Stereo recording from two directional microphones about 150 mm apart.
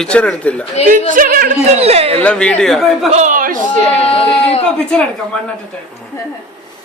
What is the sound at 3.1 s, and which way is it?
Speech, 60° right (ahead or behind).